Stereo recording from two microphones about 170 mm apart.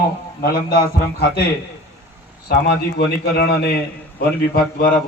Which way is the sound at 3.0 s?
70° left (ahead or behind).